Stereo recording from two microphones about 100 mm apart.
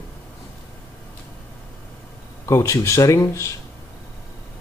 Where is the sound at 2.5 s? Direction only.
30° left (ahead or behind).